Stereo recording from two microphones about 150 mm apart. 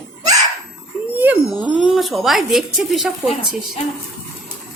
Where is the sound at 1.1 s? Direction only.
10° right (ahead or behind).